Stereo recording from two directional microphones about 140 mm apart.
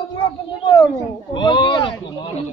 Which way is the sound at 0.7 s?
30° left (ahead or behind).